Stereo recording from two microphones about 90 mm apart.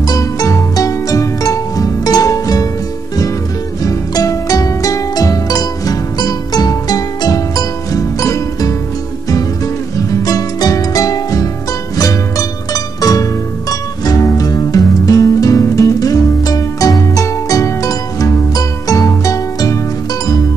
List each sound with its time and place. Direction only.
0.0 s music: 45° left (ahead or behind)
3.8 s music: 40° left (ahead or behind)
9.9 s music: 40° left (ahead or behind)